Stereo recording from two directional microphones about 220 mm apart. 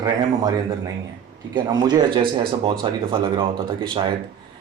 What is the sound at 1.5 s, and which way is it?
Speech, 20° right (ahead or behind).